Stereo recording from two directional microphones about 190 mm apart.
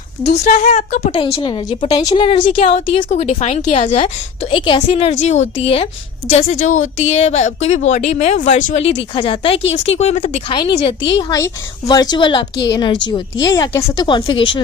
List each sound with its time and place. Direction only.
0.4 s a woman's voice: 40° left (ahead or behind)
1.1 s a woman's voice: 25° left (ahead or behind)
9.0 s a woman's voice: 25° left (ahead or behind)
10.5 s a woman's voice: 25° left (ahead or behind)